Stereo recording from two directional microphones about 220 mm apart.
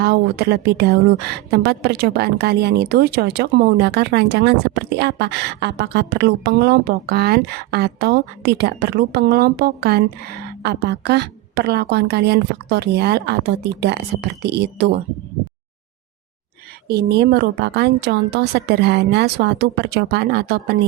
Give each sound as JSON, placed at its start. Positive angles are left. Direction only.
{"t": 0.0, "sound": "a woman's voice", "side_deg": -45}
{"t": 16.9, "sound": "a woman's voice", "side_deg": -50}